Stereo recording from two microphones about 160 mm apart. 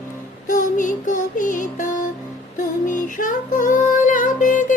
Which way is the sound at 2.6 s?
55° left (ahead or behind).